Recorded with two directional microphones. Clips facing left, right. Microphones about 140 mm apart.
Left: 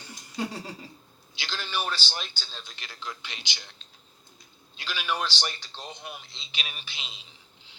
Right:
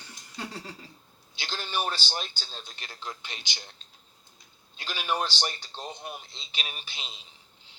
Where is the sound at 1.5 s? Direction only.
45° right (ahead or behind).